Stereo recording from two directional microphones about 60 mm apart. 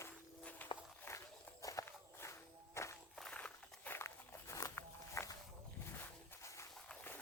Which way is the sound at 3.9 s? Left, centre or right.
Left.